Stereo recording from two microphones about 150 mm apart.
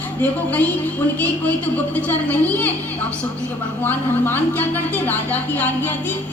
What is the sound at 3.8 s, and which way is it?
A woman's voice, 10° left (ahead or behind).